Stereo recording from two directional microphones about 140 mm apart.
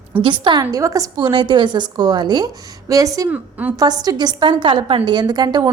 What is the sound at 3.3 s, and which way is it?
Speech, 10° right (ahead or behind).